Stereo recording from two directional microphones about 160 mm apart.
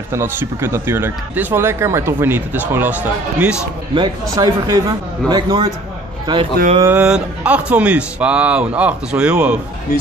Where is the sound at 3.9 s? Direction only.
25° right (ahead or behind).